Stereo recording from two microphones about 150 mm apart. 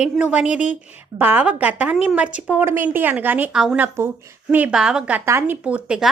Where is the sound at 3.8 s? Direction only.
15° right (ahead or behind).